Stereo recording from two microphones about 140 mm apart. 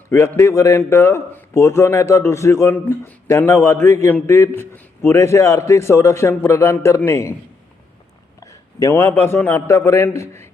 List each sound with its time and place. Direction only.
0.1 s a man's voice: 20° left (ahead or behind)
8.4 s a man's voice: 25° left (ahead or behind)